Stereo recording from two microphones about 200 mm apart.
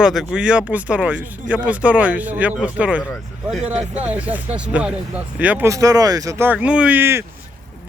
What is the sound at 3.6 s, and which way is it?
Speech, 35° right (ahead or behind).